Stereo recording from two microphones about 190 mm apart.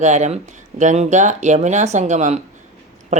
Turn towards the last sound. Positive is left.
turn(degrees=-40)  # may be behind; listen again after turning